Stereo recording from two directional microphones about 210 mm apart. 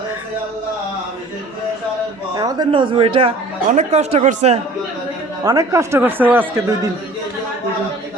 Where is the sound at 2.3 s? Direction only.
20° right (ahead or behind).